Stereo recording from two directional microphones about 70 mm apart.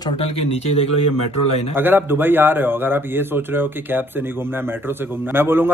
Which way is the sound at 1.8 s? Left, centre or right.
Right.